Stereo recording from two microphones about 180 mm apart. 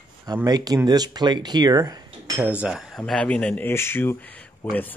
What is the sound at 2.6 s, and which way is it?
Speech, 5° right (ahead or behind).